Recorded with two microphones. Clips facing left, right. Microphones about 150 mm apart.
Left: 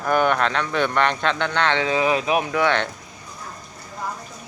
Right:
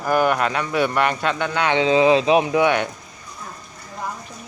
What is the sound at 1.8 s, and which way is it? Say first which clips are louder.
Speech: right 5 dB; 25° right (ahead or behind).